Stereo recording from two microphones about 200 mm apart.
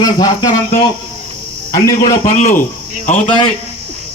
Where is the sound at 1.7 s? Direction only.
20° left (ahead or behind).